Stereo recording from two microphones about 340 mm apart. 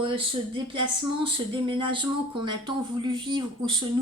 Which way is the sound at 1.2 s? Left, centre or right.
Centre.